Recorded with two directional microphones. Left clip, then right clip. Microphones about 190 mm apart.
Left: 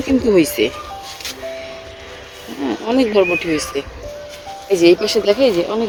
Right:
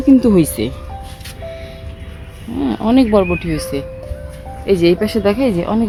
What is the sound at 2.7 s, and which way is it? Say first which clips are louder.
Speech: right 3 dB; 15° right (ahead or behind).